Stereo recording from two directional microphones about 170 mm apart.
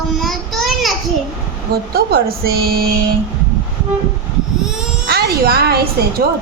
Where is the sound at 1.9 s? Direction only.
65° right (ahead or behind).